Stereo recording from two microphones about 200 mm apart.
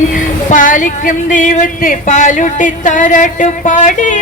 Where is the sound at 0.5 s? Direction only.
40° left (ahead or behind).